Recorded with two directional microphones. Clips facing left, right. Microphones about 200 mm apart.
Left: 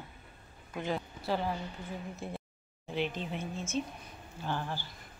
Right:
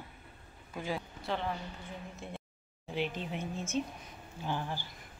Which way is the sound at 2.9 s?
10° right (ahead or behind).